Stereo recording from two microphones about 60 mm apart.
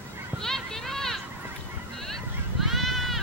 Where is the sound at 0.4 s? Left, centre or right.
Centre.